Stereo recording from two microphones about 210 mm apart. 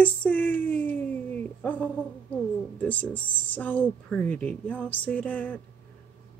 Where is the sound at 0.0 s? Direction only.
5° left (ahead or behind).